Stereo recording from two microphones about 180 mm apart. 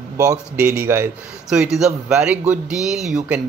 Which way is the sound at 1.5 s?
5° right (ahead or behind).